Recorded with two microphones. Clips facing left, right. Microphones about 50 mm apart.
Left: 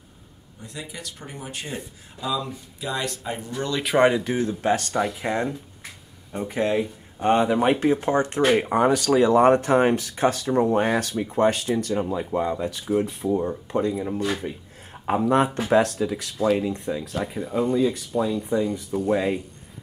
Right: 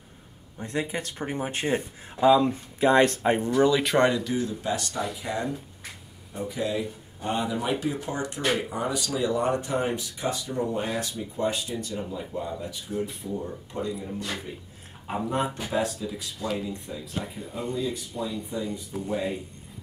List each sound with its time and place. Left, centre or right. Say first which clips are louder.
0.6 s speech: right 7 dB; right
3.8 s speech: left 3 dB; centre
4.2 s speech: left 4 dB; left
8.5 s speech: left 9 dB; left
15.2 s speech: left 8 dB; left